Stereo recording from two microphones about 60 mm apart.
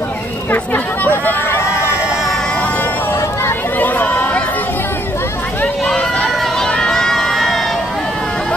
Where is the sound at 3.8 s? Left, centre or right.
Left.